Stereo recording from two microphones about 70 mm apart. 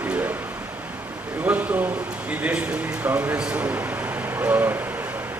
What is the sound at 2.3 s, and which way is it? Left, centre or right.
Speech, centre.